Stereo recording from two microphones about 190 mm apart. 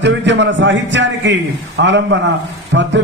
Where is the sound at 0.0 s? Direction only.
70° right (ahead or behind).